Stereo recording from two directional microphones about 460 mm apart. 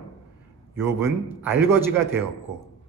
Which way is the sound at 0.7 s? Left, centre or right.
Centre.